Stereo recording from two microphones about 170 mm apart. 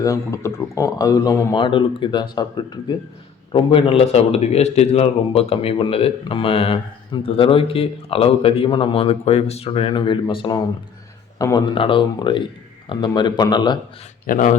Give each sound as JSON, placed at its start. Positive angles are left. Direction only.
{"t": 0.0, "sound": "a man's voice", "side_deg": 20}
{"t": 14.3, "sound": "speech", "side_deg": 50}